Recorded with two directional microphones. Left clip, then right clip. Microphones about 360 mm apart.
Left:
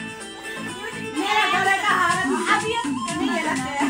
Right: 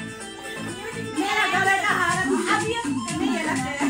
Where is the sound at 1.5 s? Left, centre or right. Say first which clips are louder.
Left 1 dB; left.